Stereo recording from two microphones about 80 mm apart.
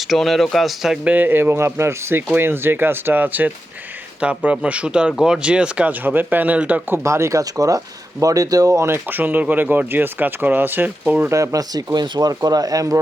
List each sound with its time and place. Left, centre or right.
0.1 s speech: centre
1.0 s speech: right
6.9 s speech: right; by 11.3 s centre
11.3 s speech: right